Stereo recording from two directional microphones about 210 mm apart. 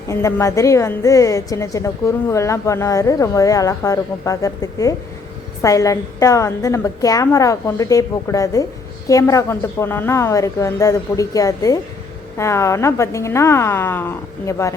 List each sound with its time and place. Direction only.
0.1 s a woman's voice: 15° left (ahead or behind)